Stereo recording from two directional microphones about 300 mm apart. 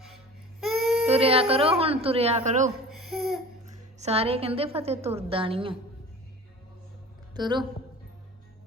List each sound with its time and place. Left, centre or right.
0.8 s child singing: centre
1.0 s a woman's voice: centre
2.9 s a sound: centre
3.9 s a woman's voice: right
7.3 s a woman's voice: centre